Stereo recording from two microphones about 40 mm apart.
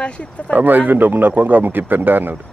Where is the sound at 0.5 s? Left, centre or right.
Right.